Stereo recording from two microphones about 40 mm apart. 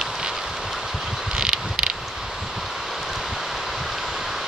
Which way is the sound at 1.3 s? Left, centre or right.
Right.